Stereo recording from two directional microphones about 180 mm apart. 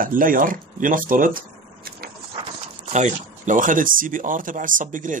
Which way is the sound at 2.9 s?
45° right (ahead or behind).